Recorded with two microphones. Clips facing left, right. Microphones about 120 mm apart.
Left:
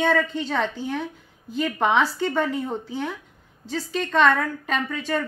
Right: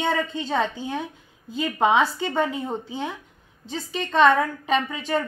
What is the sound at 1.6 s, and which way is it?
A woman's voice, 15° right (ahead or behind).